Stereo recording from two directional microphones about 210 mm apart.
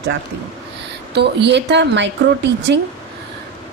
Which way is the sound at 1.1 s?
55° right (ahead or behind).